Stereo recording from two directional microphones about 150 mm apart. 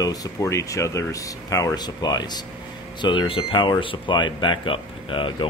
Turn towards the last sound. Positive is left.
turn(degrees=35)  # may be behind; listen again after turning